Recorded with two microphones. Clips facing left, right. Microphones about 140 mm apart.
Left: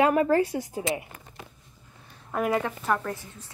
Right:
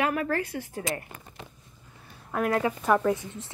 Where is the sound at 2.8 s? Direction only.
10° right (ahead or behind).